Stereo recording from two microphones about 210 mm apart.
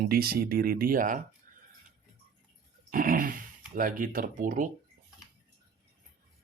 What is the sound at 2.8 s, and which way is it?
Speech, 40° right (ahead or behind).